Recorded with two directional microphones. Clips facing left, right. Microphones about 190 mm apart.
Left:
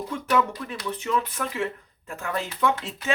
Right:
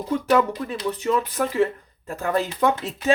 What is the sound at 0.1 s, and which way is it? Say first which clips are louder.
Speech: right 5 dB; 40° right (ahead or behind).